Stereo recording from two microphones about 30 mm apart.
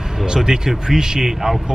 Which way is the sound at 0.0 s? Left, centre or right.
Centre.